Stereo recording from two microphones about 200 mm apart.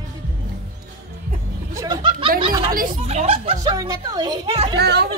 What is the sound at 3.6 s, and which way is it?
Speech, 20° right (ahead or behind).